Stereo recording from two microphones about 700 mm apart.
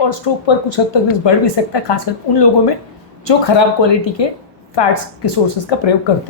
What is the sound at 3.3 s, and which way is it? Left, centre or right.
Speech, left.